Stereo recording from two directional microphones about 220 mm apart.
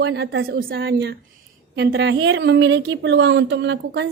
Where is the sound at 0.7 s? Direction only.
55° right (ahead or behind).